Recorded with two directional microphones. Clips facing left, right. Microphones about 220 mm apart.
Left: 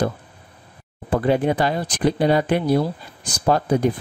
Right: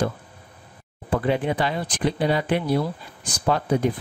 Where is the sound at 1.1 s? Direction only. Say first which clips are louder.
Left 4 dB; 40° left (ahead or behind).